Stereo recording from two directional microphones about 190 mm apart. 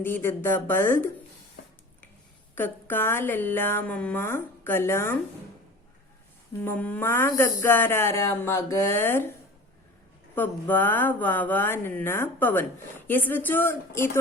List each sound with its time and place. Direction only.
0.0 s speech: 10° left (ahead or behind)
1.6 s a sound: 55° left (ahead or behind)
2.6 s speech: 10° left (ahead or behind)
6.7 s speech: 10° left (ahead or behind)
10.3 s speech: 10° left (ahead or behind)